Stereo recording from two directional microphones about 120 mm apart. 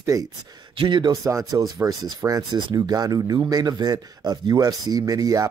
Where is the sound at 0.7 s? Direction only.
40° right (ahead or behind).